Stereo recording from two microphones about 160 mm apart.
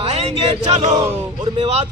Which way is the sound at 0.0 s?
40° right (ahead or behind).